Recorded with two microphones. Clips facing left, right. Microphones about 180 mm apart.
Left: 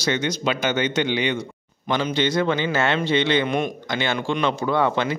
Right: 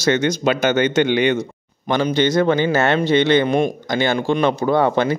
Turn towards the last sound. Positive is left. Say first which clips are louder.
# right 5 dB
turn(degrees=-45)  # may be behind; listen again after turning